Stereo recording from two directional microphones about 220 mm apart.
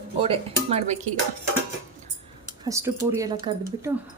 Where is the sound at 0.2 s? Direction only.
25° right (ahead or behind).